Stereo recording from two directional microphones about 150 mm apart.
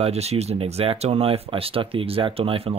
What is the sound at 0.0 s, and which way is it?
Speech, 45° right (ahead or behind).